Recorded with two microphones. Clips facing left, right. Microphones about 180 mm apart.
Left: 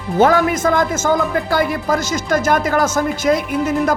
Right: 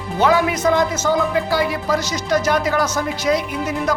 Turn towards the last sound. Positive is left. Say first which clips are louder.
# left 5 dB
turn(degrees=50)  # may be behind; listen again after turning